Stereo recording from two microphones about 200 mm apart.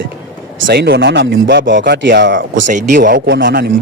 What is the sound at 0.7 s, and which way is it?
Speech, 55° right (ahead or behind).